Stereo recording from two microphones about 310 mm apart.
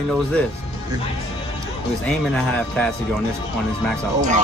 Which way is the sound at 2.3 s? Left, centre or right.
Centre.